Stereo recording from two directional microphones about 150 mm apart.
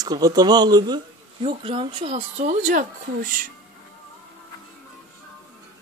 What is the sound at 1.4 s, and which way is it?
Speech, 35° right (ahead or behind).